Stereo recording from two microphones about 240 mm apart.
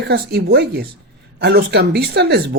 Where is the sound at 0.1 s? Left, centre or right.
Right.